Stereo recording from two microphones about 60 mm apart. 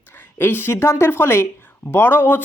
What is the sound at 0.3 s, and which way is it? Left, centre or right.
Speech, left.